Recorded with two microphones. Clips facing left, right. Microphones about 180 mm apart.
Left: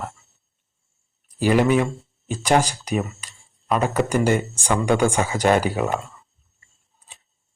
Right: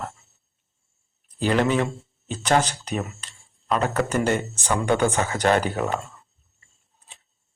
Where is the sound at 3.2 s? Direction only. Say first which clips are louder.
Left 2 dB; 10° left (ahead or behind).